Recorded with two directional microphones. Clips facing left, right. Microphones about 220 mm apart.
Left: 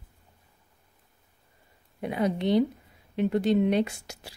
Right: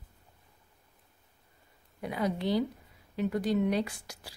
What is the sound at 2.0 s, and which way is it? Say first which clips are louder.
A woman's voice: left 4 dB; 20° left (ahead or behind).